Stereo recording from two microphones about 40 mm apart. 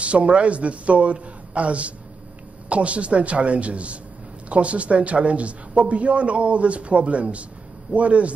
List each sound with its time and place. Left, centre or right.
0.0 s speech: right